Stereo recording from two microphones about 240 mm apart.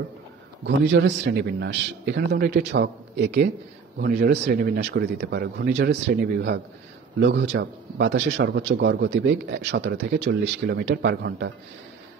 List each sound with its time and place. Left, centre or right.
0.7 s speech: right
7.2 s speech: right